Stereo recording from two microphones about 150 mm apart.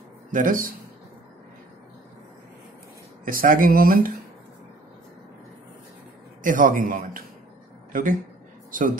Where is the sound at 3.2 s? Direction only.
65° right (ahead or behind).